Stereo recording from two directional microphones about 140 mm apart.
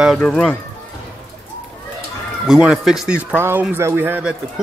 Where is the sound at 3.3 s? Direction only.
15° right (ahead or behind).